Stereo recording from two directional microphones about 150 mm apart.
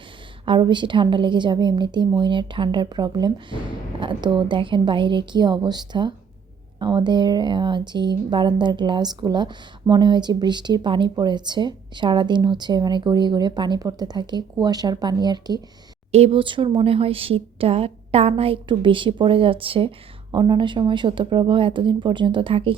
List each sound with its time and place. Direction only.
0.4 s a woman's voice: 30° right (ahead or behind)
16.1 s a woman's voice: 40° right (ahead or behind)